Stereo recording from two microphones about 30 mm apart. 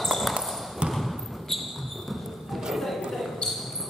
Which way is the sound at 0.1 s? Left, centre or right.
Centre.